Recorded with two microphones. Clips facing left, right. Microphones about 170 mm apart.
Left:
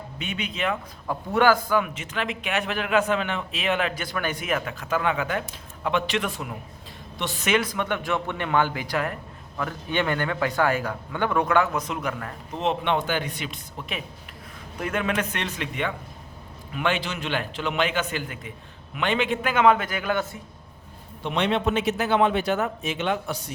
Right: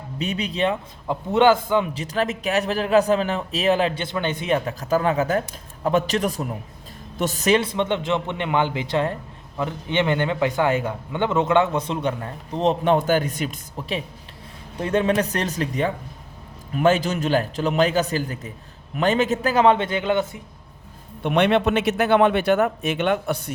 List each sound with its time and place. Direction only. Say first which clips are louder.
0.2 s a man's voice: right 6 dB; 35° right (ahead or behind)
1.0 s a man's voice: right 4 dB; 20° right (ahead or behind)
21.2 s a man's voice: right 5 dB; 60° right (ahead or behind)